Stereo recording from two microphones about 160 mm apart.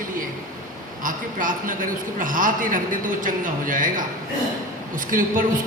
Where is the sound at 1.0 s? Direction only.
55° right (ahead or behind).